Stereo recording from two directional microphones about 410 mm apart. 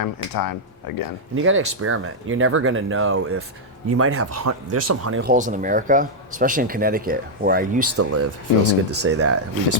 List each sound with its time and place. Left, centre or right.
0.0 s speech: left
1.4 s speech: right
5.2 s speech: centre
7.9 s speech: right